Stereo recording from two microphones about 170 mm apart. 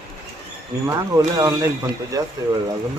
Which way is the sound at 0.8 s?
20° right (ahead or behind).